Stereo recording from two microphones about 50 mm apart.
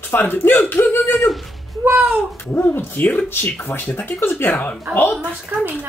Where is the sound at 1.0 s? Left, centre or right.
Centre.